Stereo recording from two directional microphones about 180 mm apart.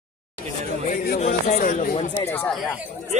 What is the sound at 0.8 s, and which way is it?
Speech, 50° left (ahead or behind).